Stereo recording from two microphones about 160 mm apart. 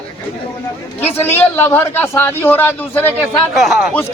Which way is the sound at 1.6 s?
15° left (ahead or behind).